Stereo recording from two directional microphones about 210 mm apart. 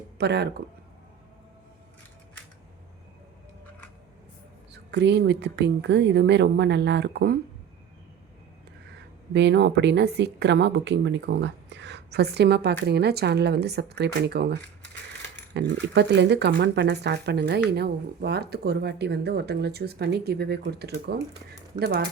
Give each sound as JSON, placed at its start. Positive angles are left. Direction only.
{"t": 0.2, "sound": "speech", "side_deg": -50}
{"t": 4.7, "sound": "speech", "side_deg": -55}
{"t": 9.3, "sound": "speech", "side_deg": -55}